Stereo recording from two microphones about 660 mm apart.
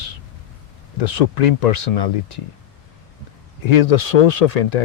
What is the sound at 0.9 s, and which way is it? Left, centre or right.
Speech, left.